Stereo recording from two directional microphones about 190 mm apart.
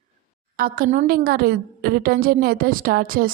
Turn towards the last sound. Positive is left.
turn(degrees=-50)  # may be behind; listen again after turning